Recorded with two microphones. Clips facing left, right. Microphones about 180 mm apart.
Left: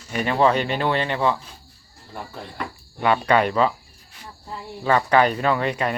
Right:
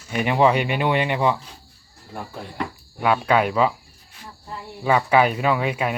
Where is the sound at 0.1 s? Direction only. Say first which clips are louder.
Right 1 dB; 15° right (ahead or behind).